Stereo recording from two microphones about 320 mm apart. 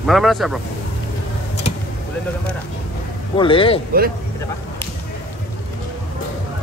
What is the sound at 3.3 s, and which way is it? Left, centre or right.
Speech, centre.